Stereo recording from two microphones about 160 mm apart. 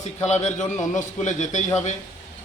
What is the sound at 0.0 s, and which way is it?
A man's voice, 45° left (ahead or behind).